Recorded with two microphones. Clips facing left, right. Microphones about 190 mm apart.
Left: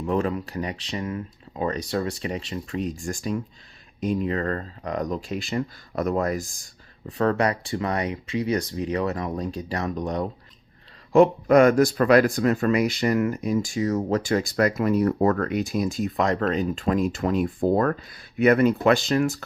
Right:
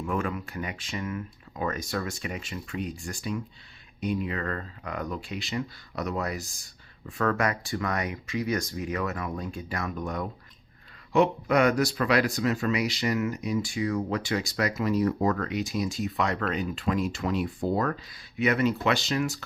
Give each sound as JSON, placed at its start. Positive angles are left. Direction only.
{"t": 0.0, "sound": "speech", "side_deg": 35}
{"t": 7.1, "sound": "speech", "side_deg": 35}
{"t": 11.1, "sound": "speech", "side_deg": 45}